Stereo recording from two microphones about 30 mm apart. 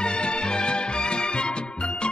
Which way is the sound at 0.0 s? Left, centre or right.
Left.